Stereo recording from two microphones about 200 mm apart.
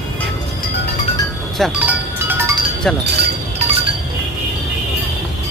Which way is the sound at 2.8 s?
5° left (ahead or behind).